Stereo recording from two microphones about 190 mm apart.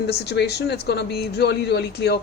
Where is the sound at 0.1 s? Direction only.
60° left (ahead or behind).